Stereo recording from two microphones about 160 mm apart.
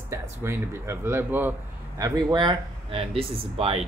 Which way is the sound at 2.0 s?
25° right (ahead or behind).